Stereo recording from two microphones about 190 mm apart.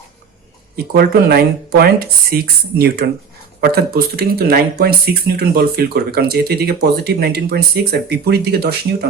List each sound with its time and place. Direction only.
0.9 s speech: 55° right (ahead or behind)